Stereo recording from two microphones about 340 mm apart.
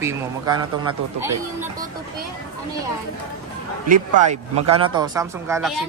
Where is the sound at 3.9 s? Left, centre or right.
Centre.